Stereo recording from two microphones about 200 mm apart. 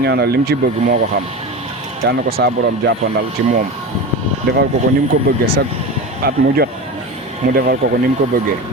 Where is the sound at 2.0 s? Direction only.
55° right (ahead or behind).